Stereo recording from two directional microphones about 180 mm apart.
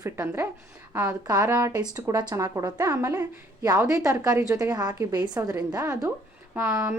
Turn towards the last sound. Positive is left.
turn(degrees=-15)  # may be behind; listen again after turning